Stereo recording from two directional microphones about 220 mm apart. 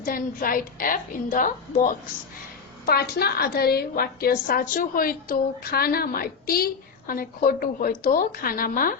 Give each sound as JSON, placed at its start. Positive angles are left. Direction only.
{"t": 0.0, "sound": "a woman's voice", "side_deg": 40}